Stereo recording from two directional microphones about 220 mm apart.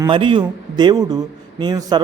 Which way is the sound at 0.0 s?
20° right (ahead or behind).